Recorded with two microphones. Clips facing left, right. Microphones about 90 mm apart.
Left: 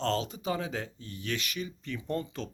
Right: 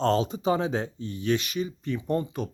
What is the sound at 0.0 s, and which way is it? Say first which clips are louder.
Speech: right 7 dB; 20° right (ahead or behind).